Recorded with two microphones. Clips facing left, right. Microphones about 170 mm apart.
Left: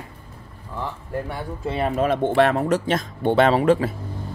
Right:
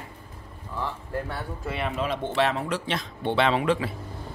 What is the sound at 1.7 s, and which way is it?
Speech, 40° left (ahead or behind).